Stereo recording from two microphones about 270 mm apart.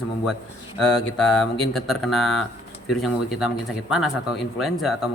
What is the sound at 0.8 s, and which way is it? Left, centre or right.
Speech, centre.